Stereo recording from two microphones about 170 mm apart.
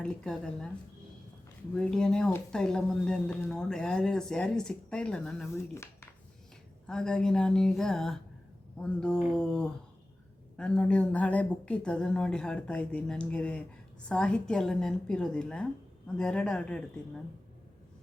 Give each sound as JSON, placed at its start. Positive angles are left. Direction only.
{"t": 0.0, "sound": "speech", "side_deg": 5}
{"t": 1.7, "sound": "speech", "side_deg": 5}
{"t": 5.7, "sound": "a sound", "side_deg": 15}
{"t": 6.8, "sound": "speech", "side_deg": 5}